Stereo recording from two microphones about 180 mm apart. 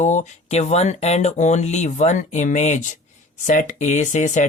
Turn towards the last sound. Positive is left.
turn(degrees=45)  # may be behind; listen again after turning